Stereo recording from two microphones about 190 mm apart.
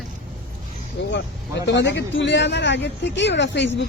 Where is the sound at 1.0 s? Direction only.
70° left (ahead or behind).